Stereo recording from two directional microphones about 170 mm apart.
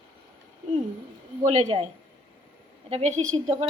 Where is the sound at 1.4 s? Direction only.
40° right (ahead or behind).